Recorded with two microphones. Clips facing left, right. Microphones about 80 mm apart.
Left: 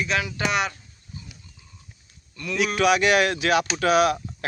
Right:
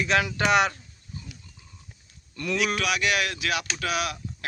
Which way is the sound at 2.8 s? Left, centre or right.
Left.